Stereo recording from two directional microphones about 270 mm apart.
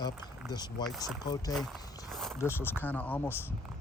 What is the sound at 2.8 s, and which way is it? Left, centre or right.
Speech, centre.